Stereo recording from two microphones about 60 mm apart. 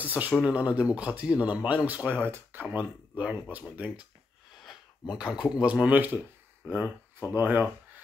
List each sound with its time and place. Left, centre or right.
0.0 s speech: right
5.0 s speech: centre
7.2 s speech: right